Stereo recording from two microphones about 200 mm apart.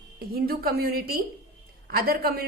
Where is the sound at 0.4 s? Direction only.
50° right (ahead or behind).